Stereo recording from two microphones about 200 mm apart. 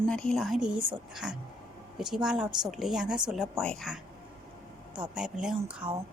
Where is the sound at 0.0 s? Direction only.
5° left (ahead or behind).